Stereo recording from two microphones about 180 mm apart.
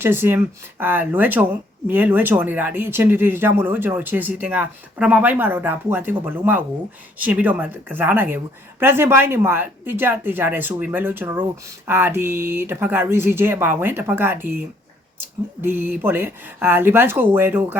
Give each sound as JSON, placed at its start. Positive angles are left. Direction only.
{"t": 0.0, "sound": "speech", "side_deg": -10}
{"t": 15.6, "sound": "speech", "side_deg": -10}